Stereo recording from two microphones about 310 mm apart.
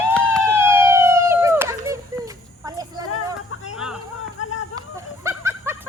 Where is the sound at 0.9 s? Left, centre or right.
Centre.